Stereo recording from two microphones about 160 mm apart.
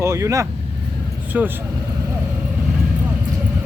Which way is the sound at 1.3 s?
10° right (ahead or behind).